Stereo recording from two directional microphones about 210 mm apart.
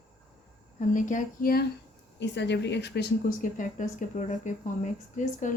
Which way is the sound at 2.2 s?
55° left (ahead or behind).